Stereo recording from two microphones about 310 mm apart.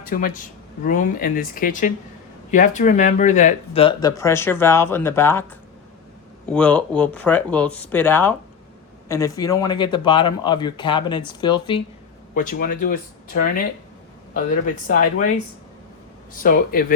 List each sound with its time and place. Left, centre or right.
0.0 s speech: left
12.3 s speech: left
14.8 s speech: left
16.3 s speech: left